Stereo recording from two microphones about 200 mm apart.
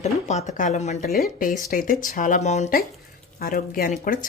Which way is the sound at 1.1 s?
45° left (ahead or behind).